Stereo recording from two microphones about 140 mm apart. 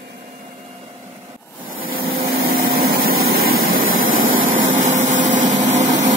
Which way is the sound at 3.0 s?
90° right.